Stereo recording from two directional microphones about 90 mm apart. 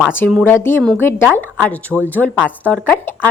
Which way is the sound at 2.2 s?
5° left (ahead or behind).